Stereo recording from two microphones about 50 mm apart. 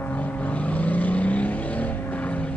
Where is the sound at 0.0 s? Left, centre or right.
Left.